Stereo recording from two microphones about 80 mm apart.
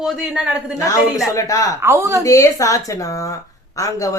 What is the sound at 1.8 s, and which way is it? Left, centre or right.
Speech, right.